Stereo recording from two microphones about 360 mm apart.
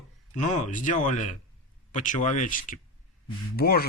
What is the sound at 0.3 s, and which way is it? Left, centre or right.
Speech, centre.